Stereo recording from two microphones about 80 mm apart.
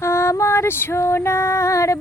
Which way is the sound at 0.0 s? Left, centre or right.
Left.